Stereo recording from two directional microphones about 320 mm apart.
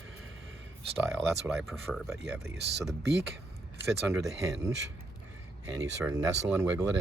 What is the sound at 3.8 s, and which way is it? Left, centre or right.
Speech, centre.